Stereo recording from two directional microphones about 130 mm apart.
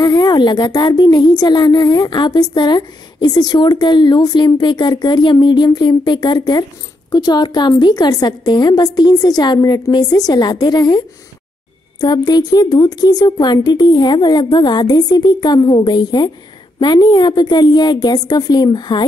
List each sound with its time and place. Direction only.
0.0 s a woman's voice: 30° left (ahead or behind)